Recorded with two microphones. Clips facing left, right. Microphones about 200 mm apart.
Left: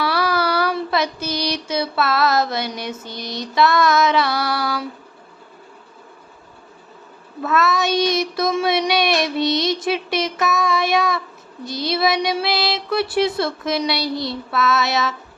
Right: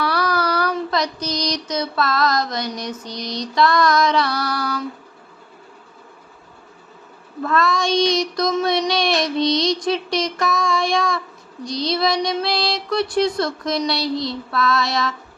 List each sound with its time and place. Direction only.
0.1 s child singing: 25° left (ahead or behind)
0.7 s child singing: 5° left (ahead or behind)
1.2 s a sound: 5° left (ahead or behind)
2.9 s child singing: 5° left (ahead or behind)
7.4 s child singing: 5° left (ahead or behind)